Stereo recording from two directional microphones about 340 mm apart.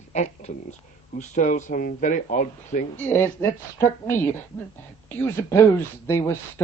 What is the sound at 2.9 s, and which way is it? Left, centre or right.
Speech, centre.